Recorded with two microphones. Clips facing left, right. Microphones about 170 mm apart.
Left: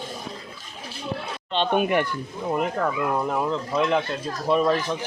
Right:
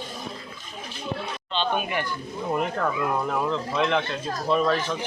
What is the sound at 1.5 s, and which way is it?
Speech, 60° left (ahead or behind).